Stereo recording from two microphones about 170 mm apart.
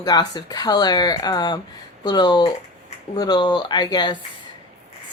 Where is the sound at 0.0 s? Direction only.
25° left (ahead or behind).